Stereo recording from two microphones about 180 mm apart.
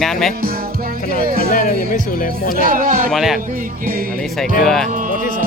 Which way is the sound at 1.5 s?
50° left (ahead or behind).